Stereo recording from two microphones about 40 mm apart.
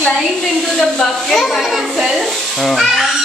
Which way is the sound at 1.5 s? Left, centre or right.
Centre.